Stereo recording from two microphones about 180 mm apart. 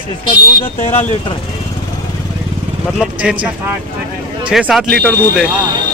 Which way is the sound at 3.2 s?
5° right (ahead or behind).